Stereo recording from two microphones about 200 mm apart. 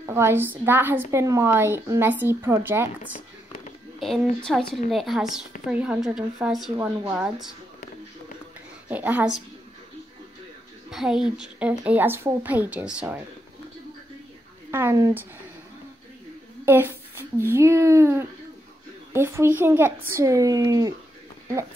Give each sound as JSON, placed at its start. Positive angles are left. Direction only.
{"t": 0.0, "sound": "a woman's voice", "side_deg": -10}
{"t": 4.0, "sound": "a woman's voice", "side_deg": 0}
{"t": 8.8, "sound": "a woman's voice", "side_deg": -10}
{"t": 10.9, "sound": "a woman's voice", "side_deg": 0}
{"t": 14.7, "sound": "a woman's voice", "side_deg": -10}
{"t": 16.6, "sound": "a woman's voice", "side_deg": -10}